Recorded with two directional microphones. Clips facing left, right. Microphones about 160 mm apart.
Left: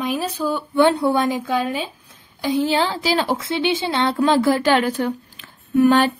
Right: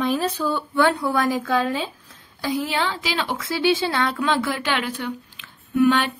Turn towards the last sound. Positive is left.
turn(degrees=40)  # may be behind; listen again after turning